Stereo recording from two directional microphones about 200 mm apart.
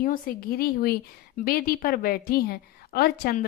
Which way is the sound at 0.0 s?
45° left (ahead or behind).